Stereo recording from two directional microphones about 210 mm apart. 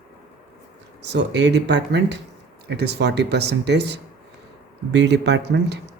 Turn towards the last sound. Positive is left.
turn(degrees=-55)  # may be behind; listen again after turning